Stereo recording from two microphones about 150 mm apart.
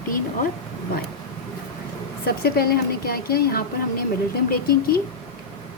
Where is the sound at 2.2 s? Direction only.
90° left.